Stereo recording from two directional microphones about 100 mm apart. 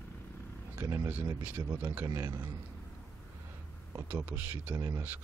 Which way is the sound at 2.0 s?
35° right (ahead or behind).